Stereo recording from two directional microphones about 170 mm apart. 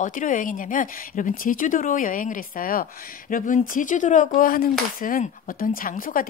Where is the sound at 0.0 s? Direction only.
50° left (ahead or behind).